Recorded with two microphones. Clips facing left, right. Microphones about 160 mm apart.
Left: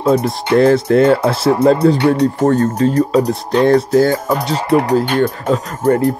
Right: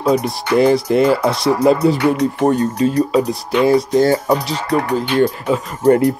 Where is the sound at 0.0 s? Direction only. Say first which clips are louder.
Left 2 dB; 5° left (ahead or behind).